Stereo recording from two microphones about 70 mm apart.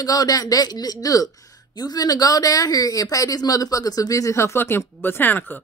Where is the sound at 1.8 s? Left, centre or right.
Left.